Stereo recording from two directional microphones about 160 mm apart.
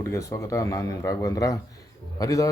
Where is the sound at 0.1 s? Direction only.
15° left (ahead or behind).